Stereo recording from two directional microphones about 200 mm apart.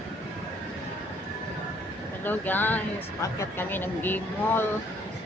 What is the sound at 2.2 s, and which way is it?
Speech, 10° left (ahead or behind).